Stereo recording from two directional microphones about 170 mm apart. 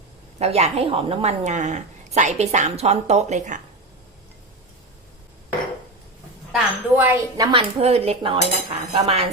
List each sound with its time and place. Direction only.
0.3 s a woman's voice: 40° right (ahead or behind)
6.5 s a woman's voice: 10° right (ahead or behind); by 9.3 s 40° right (ahead or behind)